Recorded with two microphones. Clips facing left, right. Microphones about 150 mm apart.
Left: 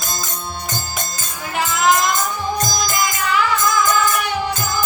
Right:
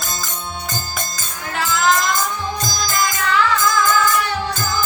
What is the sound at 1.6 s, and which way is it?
Music, 15° left (ahead or behind).